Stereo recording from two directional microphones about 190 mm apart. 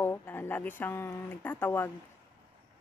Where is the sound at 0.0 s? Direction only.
10° left (ahead or behind).